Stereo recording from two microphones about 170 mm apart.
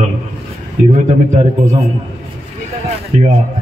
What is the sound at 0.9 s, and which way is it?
Speech, 45° right (ahead or behind).